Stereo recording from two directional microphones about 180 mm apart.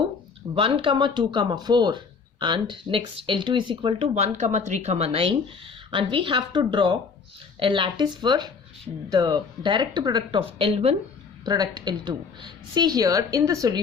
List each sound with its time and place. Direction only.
0.5 s speech: 30° right (ahead or behind)
11.4 s speech: 20° right (ahead or behind)